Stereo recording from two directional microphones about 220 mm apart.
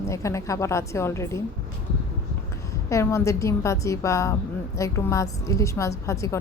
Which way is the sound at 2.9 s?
10° left (ahead or behind).